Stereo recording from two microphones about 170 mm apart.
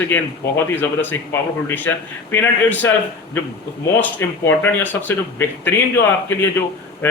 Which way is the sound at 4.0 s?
10° left (ahead or behind).